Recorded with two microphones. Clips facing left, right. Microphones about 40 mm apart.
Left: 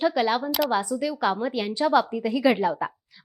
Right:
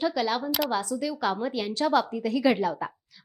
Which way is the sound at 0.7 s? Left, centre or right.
Centre.